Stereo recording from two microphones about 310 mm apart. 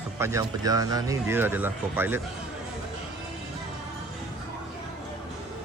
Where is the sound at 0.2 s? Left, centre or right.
Centre.